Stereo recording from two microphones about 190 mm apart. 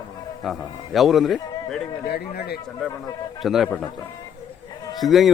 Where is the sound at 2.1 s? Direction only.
55° left (ahead or behind).